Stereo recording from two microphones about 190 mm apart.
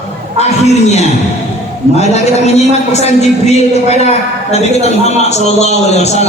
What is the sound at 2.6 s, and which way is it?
A man's voice, 35° left (ahead or behind).